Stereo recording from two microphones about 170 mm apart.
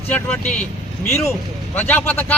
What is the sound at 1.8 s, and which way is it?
Speech, 10° left (ahead or behind).